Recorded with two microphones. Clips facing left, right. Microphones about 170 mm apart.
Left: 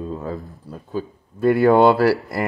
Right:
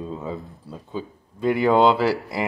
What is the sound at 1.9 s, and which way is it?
Speech, 15° right (ahead or behind).